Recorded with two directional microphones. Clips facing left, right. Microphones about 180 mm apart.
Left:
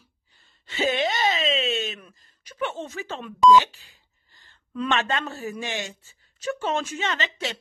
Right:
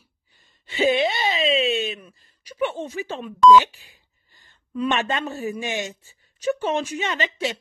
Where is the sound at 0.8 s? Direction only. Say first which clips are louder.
Right 3 dB; 40° left (ahead or behind).